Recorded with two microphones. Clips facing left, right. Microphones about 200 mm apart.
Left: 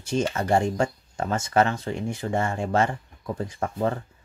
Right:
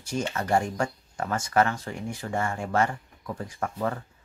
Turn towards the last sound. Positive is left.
turn(degrees=25)  # may be behind; listen again after turning